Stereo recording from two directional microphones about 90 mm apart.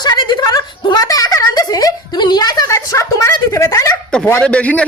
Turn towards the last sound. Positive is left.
turn(degrees=15)  # may be behind; listen again after turning